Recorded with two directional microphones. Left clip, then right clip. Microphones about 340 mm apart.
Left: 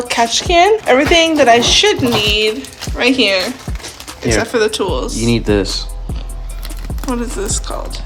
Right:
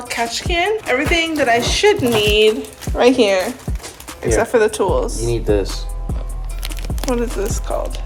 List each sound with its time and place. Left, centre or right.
0.1 s speech: centre
5.2 s speech: left
6.8 s speech: centre